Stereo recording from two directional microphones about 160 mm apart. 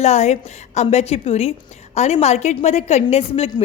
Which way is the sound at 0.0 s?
45° left (ahead or behind).